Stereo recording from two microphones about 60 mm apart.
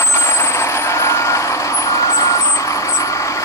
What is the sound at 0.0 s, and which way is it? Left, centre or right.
Vehicle, left.